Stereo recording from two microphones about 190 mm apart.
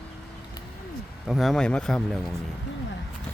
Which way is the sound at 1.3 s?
Centre (ahead or behind).